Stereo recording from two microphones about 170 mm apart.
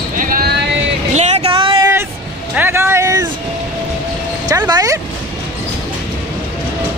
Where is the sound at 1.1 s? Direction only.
40° right (ahead or behind).